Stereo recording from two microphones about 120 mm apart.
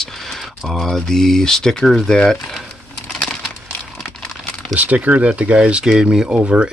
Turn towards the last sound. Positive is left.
turn(degrees=-10)  # may be behind; listen again after turning